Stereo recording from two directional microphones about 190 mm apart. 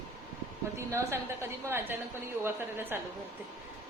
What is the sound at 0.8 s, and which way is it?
Speech, 15° right (ahead or behind).